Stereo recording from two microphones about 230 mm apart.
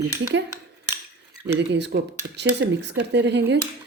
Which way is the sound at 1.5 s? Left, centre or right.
Right.